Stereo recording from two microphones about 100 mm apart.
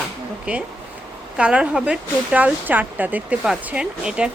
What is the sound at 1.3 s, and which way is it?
Speech, 10° right (ahead or behind).